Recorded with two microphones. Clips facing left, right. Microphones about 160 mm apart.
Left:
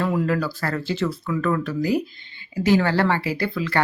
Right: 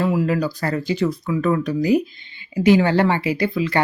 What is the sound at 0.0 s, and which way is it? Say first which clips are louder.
Speech: right 3 dB; 10° right (ahead or behind).